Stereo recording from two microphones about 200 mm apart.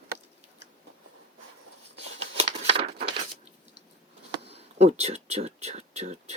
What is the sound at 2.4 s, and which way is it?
Crumpling, 30° right (ahead or behind).